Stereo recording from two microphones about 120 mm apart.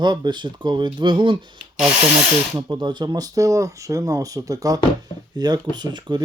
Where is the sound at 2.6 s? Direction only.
40° right (ahead or behind).